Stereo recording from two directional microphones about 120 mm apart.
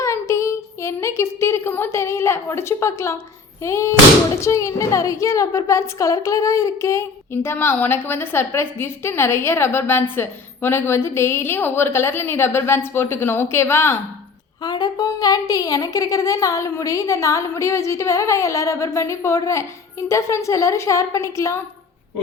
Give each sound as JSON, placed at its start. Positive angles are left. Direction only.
{"t": 0.0, "sound": "a woman's voice", "side_deg": 25}
{"t": 14.6, "sound": "a woman's voice", "side_deg": 35}